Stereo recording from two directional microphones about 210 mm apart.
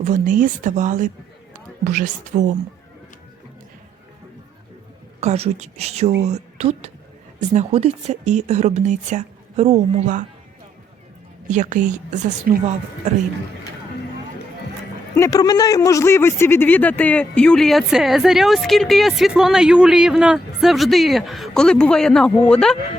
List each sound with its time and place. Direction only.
0.0 s speech: 35° right (ahead or behind)
5.2 s speech: 30° right (ahead or behind)
11.4 s speech: 35° right (ahead or behind)
15.1 s a man's voice: 15° left (ahead or behind)